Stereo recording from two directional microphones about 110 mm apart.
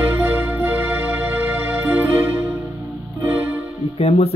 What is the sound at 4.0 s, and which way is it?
Speech, 65° left (ahead or behind).